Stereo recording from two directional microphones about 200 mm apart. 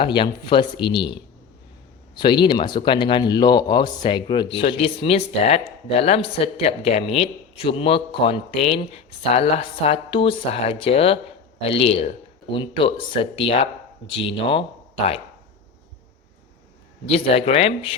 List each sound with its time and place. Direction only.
0.0 s speech: 25° left (ahead or behind)
17.1 s speech: 30° left (ahead or behind)